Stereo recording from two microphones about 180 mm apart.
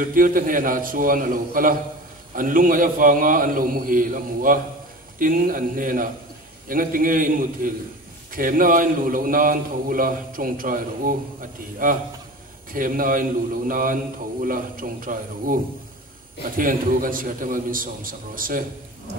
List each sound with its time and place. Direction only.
0.0 s a man's voice: 50° right (ahead or behind)